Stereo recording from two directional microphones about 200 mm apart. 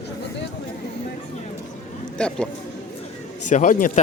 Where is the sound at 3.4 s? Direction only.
40° left (ahead or behind).